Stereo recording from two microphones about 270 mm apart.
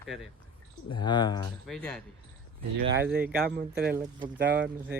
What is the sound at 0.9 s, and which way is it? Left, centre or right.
Speech, centre.